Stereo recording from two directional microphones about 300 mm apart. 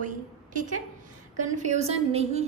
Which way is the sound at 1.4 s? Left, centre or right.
Right.